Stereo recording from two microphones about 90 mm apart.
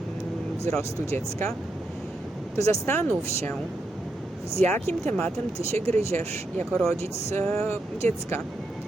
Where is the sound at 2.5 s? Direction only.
35° left (ahead or behind).